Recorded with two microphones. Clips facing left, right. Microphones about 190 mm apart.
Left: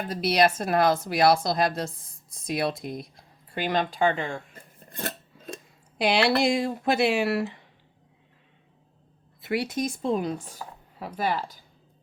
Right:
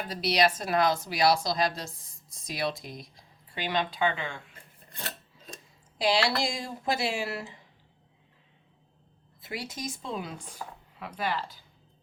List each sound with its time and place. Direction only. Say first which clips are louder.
0.1 s a woman's voice: left 3 dB; 50° left (ahead or behind)
4.8 s filing: left 7 dB; 45° left (ahead or behind)
6.0 s speech: left 4 dB; 60° left (ahead or behind)
9.4 s speech: left 10 dB; 65° left (ahead or behind); by 11.6 s 45° left (ahead or behind)